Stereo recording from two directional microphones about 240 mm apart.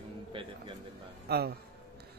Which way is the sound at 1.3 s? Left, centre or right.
Right.